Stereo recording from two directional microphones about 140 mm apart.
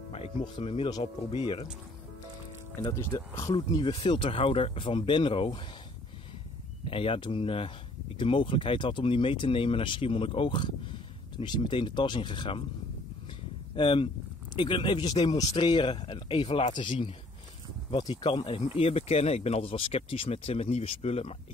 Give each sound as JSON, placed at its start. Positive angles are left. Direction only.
{"t": 0.1, "sound": "speech", "side_deg": 45}
{"t": 2.8, "sound": "speech", "side_deg": 25}
{"t": 3.5, "sound": "speech", "side_deg": 40}
{"t": 6.9, "sound": "speech", "side_deg": 40}
{"t": 13.7, "sound": "speech", "side_deg": 40}
{"t": 18.1, "sound": "speech", "side_deg": 35}